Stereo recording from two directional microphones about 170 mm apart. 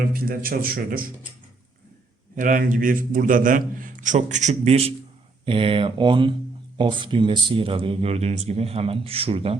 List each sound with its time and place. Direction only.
0.1 s a man's voice: 60° right (ahead or behind)
2.3 s a man's voice: 50° right (ahead or behind); by 9.6 s 35° right (ahead or behind)